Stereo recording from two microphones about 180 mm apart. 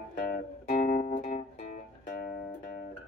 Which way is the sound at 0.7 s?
45° left (ahead or behind).